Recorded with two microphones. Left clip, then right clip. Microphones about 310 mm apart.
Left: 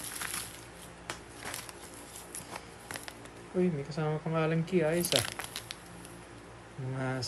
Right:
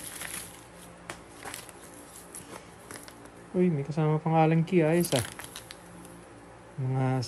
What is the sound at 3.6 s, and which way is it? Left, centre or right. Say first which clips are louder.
Speech: right 4 dB; centre.